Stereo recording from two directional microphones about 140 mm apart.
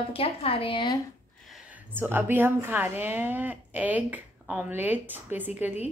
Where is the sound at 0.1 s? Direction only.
45° left (ahead or behind).